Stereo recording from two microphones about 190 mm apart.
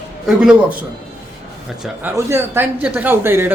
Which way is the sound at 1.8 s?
10° right (ahead or behind).